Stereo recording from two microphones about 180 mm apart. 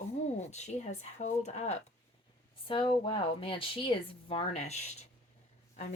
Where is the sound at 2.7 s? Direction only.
30° left (ahead or behind).